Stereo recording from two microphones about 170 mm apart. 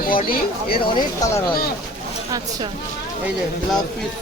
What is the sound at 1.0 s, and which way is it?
Speech, 20° left (ahead or behind).